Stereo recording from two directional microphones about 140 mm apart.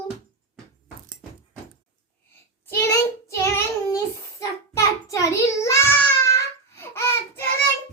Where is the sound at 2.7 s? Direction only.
20° left (ahead or behind).